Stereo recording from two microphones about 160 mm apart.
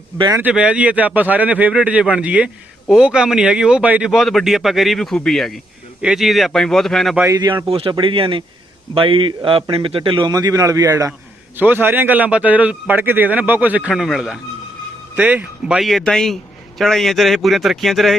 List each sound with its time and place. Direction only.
0.3 s a man's voice: 10° right (ahead or behind)
7.2 s a man's voice: 20° right (ahead or behind); by 18.2 s centre (ahead or behind)